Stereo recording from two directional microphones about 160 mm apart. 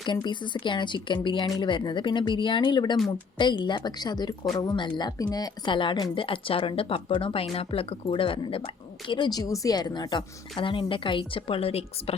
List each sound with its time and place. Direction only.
0.0 s a woman's voice: 30° left (ahead or behind)